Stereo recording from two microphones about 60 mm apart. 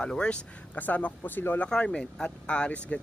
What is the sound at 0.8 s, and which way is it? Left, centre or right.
Speech, left.